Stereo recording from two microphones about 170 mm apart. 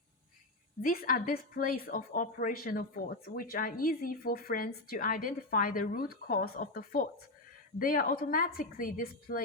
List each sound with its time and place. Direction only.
0.8 s a woman's voice: 55° left (ahead or behind)